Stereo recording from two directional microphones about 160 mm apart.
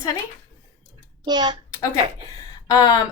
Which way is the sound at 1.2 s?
25° right (ahead or behind).